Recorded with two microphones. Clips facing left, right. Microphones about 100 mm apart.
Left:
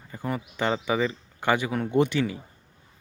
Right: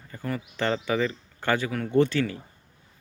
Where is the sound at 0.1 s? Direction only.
20° left (ahead or behind).